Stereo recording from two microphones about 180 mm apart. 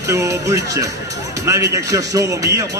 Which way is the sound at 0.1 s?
15° right (ahead or behind).